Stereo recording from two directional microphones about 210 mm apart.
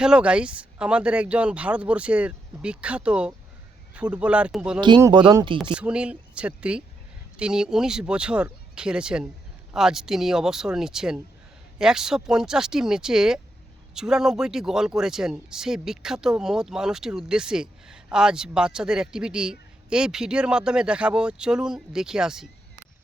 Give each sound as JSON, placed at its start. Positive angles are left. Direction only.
{"t": 0.0, "sound": "speech", "side_deg": -5}
{"t": 4.8, "sound": "speech", "side_deg": -20}
{"t": 5.7, "sound": "speech", "side_deg": -5}